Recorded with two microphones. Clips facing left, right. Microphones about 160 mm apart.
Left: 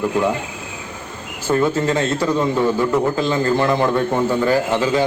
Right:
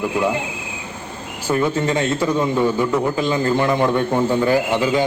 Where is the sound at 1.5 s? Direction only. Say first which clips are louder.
Left 2 dB; 10° right (ahead or behind).